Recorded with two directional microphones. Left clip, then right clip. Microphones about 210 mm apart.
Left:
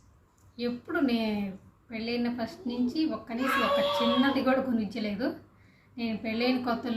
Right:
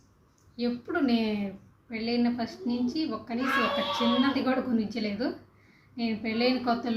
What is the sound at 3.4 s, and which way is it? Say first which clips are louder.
Speech: left 2 dB; 40° left (ahead or behind).